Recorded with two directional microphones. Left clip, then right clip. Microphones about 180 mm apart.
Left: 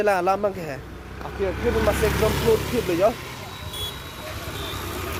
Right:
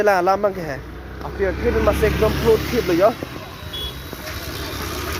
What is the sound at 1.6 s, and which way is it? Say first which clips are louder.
Speech: right 2 dB; 25° right (ahead or behind).